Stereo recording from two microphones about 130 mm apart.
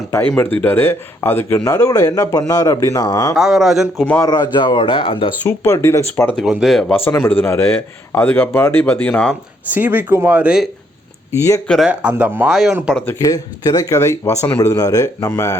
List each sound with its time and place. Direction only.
0.1 s a man's voice: 15° left (ahead or behind)
3.3 s speech: centre (ahead or behind)
4.2 s speech: 30° left (ahead or behind)
5.4 s speech: 15° left (ahead or behind)
6.3 s speech: 5° right (ahead or behind)
6.9 s a man's voice: 15° left (ahead or behind)
9.7 s speech: 15° right (ahead or behind)
11.3 s speech: 25° left (ahead or behind)
11.9 s speech: 10° right (ahead or behind)
13.1 s speech: 25° left (ahead or behind)